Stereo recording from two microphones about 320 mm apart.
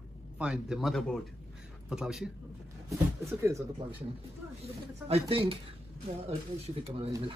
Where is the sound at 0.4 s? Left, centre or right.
Centre.